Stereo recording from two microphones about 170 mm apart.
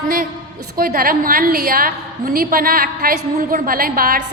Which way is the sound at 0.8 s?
60° right (ahead or behind).